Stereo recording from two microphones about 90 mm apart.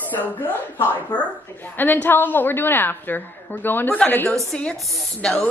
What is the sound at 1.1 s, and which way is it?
A woman's voice, 20° left (ahead or behind).